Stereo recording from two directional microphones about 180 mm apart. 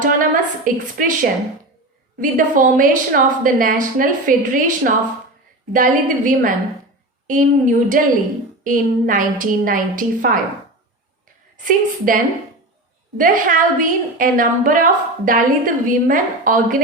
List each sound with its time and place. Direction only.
0.0 s a woman's voice: 50° right (ahead or behind)
11.5 s a woman's voice: 50° right (ahead or behind)